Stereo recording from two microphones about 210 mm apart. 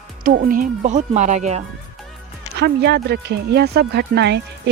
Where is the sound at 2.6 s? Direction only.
50° right (ahead or behind).